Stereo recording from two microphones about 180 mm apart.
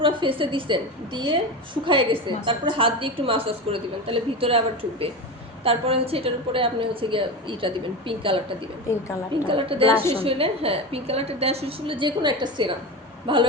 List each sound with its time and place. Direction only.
0.0 s a woman's voice: 30° right (ahead or behind)
9.5 s a woman's voice: 30° right (ahead or behind)